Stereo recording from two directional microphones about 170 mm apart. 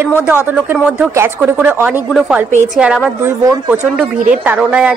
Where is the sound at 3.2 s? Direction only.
15° right (ahead or behind).